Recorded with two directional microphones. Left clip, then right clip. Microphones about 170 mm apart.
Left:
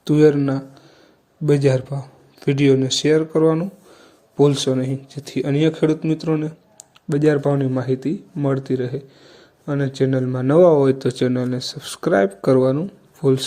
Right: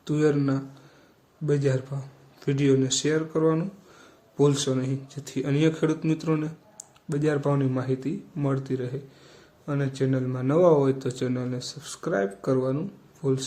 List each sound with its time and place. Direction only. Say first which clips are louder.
0.0 s a man's voice: left 9 dB; 35° left (ahead or behind)